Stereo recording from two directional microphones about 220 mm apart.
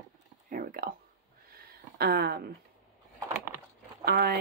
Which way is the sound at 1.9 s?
45° right (ahead or behind).